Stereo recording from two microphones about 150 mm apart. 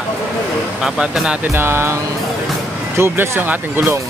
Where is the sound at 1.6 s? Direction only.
15° right (ahead or behind).